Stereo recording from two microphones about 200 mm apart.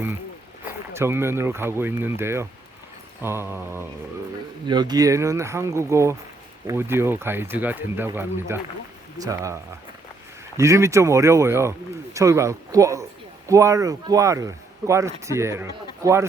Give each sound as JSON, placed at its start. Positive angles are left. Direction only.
{"t": 0.6, "sound": "speech", "side_deg": -10}
{"t": 4.6, "sound": "speech", "side_deg": -20}
{"t": 10.6, "sound": "speech", "side_deg": -15}